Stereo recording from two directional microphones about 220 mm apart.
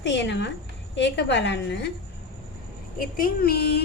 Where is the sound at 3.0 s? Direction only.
40° left (ahead or behind).